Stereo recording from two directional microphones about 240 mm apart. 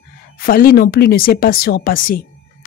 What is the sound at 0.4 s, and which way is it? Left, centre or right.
Speech, left.